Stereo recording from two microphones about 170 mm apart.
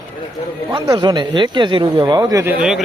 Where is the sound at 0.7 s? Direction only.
25° right (ahead or behind).